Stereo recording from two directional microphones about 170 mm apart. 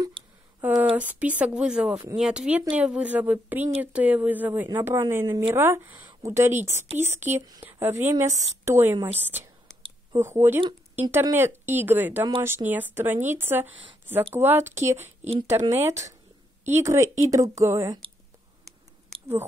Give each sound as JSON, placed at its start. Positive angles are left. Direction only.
{"t": 0.6, "sound": "speech", "side_deg": -10}
{"t": 10.1, "sound": "speech", "side_deg": -15}
{"t": 15.0, "sound": "a woman's voice", "side_deg": -40}
{"t": 16.6, "sound": "speech", "side_deg": -15}